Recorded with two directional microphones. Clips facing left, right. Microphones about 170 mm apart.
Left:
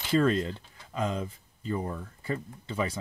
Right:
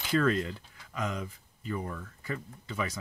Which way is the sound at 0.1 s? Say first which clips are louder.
Left 3 dB; 25° left (ahead or behind).